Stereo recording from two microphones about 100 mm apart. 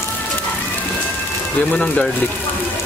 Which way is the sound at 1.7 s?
10° left (ahead or behind).